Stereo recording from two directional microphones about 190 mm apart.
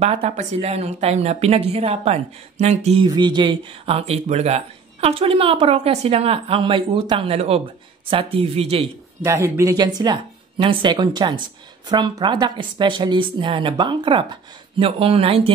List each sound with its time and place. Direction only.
0.0 s a woman's voice: 35° right (ahead or behind)
9.2 s speech: 15° right (ahead or behind)